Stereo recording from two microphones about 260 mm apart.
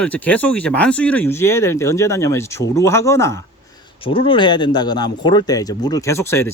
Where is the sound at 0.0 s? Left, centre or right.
Centre.